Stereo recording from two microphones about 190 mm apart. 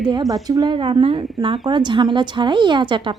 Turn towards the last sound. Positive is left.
turn(degrees=-25)  # may be behind; listen again after turning